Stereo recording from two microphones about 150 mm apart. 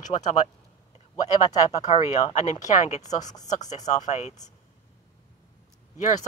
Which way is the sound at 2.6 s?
50° left (ahead or behind).